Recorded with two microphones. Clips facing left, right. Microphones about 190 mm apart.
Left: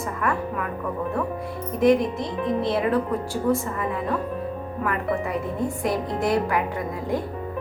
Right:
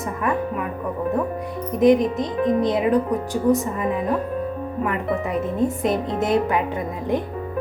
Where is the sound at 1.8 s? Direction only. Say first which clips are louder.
Right 3 dB; 20° right (ahead or behind).